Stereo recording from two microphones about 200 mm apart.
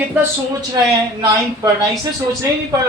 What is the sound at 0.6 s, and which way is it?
A woman's voice, 20° right (ahead or behind).